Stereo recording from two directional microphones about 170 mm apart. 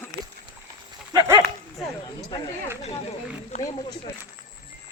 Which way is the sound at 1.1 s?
20° right (ahead or behind).